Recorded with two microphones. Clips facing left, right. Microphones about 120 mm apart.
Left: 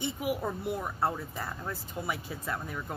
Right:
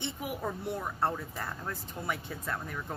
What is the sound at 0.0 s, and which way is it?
A woman's voice, 5° left (ahead or behind).